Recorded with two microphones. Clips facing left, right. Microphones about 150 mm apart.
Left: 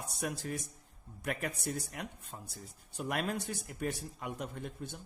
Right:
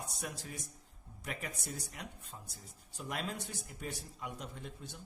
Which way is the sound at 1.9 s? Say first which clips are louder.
Left 4 dB; 55° left (ahead or behind).